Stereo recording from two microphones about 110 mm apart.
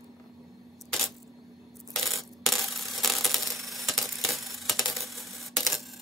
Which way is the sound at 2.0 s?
Centre (ahead or behind).